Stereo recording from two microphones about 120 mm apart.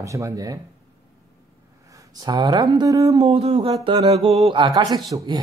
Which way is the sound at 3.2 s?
55° right (ahead or behind).